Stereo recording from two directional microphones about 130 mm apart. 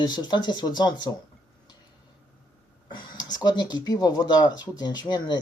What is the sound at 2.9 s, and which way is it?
Speech, 35° left (ahead or behind).